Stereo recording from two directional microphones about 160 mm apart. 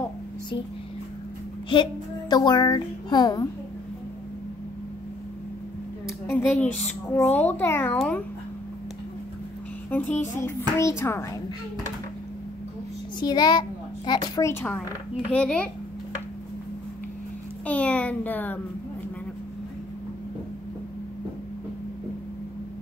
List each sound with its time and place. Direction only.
1.7 s a woman's voice: 30° left (ahead or behind)
6.0 s a woman's voice: 15° left (ahead or behind)
9.8 s a child's voice: 10° left (ahead or behind)
13.2 s a woman's voice: 25° left (ahead or behind); by 15.7 s 5° left (ahead or behind)
17.6 s a sound: 10° left (ahead or behind)